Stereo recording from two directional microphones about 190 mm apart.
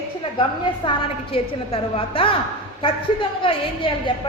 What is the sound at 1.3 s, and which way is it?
A woman's voice, 30° left (ahead or behind).